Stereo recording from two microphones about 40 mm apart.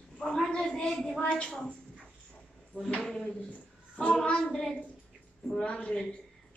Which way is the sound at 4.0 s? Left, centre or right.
Left.